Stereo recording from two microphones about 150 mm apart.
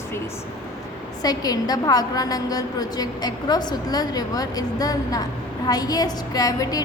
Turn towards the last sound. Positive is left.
turn(degrees=25)  # may be behind; listen again after turning